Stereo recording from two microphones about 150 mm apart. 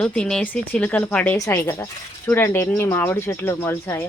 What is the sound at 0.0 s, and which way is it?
Speech, 5° left (ahead or behind).